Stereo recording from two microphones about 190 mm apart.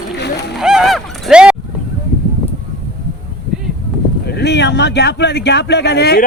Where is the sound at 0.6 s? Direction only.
5° right (ahead or behind).